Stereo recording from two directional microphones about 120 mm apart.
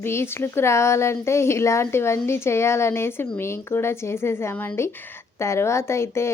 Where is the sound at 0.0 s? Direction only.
20° left (ahead or behind).